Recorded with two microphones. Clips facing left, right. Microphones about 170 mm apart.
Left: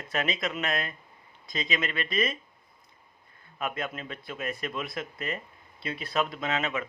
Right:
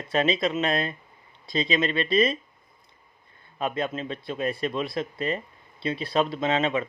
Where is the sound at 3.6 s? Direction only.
30° right (ahead or behind).